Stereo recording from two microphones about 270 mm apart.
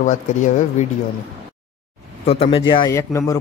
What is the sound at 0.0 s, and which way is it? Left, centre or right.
Speech, left.